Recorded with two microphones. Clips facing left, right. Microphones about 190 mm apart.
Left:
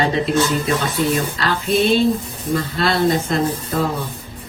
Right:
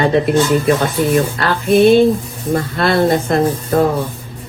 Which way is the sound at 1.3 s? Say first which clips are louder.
Right 6 dB; 55° right (ahead or behind).